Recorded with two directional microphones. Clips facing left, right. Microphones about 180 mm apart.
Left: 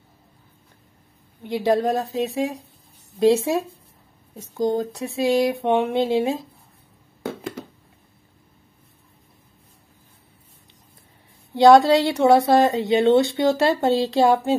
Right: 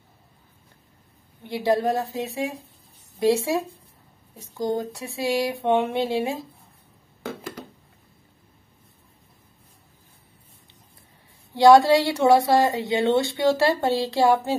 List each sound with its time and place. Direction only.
1.4 s a woman's voice: 20° left (ahead or behind)
11.5 s speech: 20° left (ahead or behind)